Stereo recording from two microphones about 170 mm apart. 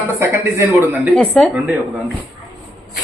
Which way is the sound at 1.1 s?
5° left (ahead or behind).